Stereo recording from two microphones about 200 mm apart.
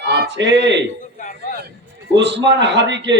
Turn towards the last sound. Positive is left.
turn(degrees=-60)  # may be behind; listen again after turning